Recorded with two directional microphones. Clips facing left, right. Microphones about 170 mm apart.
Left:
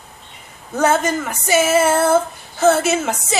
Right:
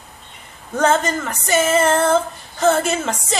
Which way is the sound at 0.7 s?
10° left (ahead or behind).